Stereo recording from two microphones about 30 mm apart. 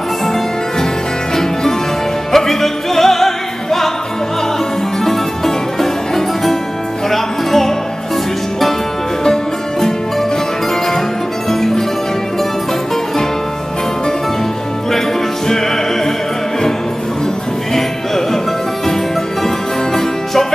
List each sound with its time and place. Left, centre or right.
1.3 s music: centre
2.3 s opera: centre
5.0 s music: centre
9.2 s music: centre
11.5 s music: centre
15.4 s music: centre
17.7 s music: centre
19.4 s music: centre